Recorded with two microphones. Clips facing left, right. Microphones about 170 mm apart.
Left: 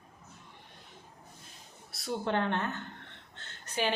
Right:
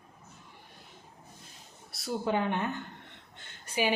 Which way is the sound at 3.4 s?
10° right (ahead or behind).